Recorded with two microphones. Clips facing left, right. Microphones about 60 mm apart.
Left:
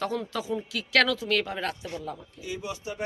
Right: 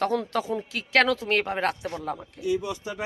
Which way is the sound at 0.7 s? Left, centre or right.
Right.